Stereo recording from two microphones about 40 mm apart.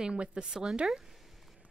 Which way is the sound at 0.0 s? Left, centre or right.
Right.